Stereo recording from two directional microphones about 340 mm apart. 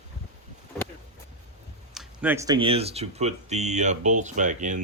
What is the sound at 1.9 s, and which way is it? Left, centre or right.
Speech, centre.